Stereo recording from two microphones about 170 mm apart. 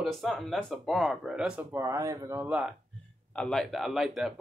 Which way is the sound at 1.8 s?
15° right (ahead or behind).